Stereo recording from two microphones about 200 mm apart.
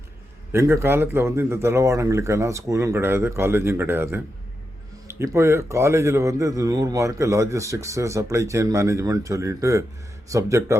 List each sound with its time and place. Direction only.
0.5 s a man's voice: 10° right (ahead or behind)